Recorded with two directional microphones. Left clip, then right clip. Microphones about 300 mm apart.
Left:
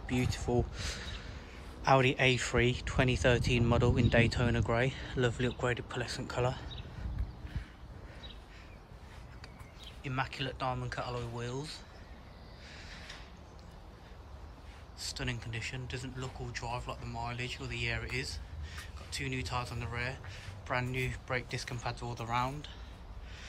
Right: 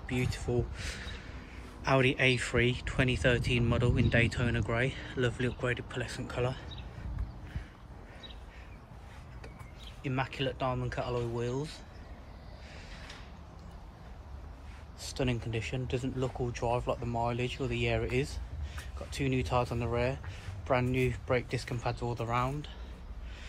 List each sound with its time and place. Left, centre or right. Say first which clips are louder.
0.0 s speech: even; left
0.6 s speech: left 1 dB; centre
10.0 s speech: right 3 dB; centre
15.0 s speech: right 4 dB; centre